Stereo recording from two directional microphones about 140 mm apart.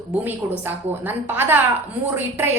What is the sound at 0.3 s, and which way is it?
A woman's voice, 15° right (ahead or behind).